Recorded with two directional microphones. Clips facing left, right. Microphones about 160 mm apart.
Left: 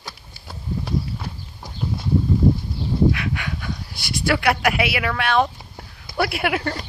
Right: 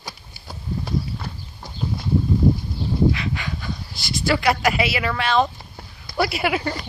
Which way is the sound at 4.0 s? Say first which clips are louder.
Right 1 dB; 60° left (ahead or behind).